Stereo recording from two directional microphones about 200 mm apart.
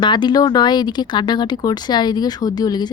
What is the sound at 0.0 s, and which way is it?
Speech, 20° left (ahead or behind).